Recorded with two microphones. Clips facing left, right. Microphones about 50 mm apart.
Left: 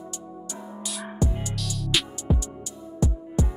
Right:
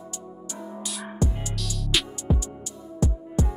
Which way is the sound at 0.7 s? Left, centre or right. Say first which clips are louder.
Right 1 dB; centre.